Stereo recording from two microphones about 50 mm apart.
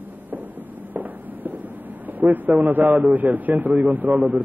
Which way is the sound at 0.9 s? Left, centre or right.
Right.